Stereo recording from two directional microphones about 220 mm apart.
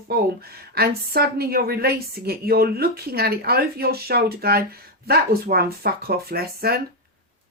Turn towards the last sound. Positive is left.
turn(degrees=-45)  # may be behind; listen again after turning